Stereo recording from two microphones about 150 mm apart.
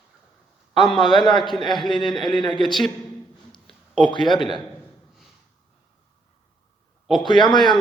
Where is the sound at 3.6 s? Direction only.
Centre (ahead or behind).